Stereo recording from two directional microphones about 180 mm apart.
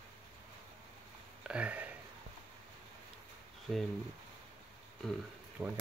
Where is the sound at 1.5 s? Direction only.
5° right (ahead or behind).